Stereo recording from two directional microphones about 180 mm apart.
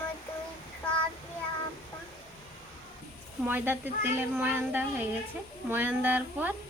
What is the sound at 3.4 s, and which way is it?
A woman's voice, 10° right (ahead or behind).